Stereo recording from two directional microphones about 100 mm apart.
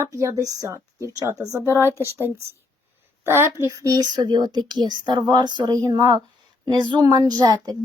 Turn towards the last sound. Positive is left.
turn(degrees=-45)  # may be behind; listen again after turning